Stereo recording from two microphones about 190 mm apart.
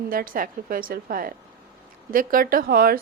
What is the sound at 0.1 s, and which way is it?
A woman's voice, 50° right (ahead or behind).